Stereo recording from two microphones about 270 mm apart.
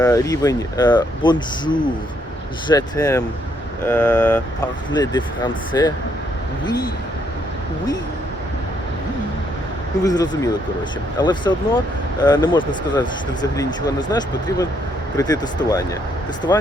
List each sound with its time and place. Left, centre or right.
0.0 s speech: centre
4.9 s speech: centre
10.0 s speech: centre